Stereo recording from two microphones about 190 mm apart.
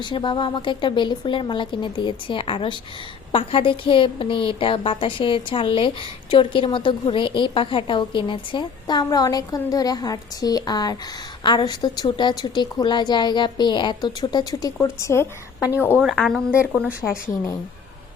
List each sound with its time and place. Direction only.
0.0 s a woman's voice: 25° left (ahead or behind)
16.0 s a woman's voice: centre (ahead or behind)
17.2 s a woman's voice: 15° left (ahead or behind)